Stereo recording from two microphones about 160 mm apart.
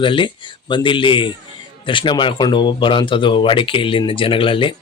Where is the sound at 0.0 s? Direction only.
30° left (ahead or behind).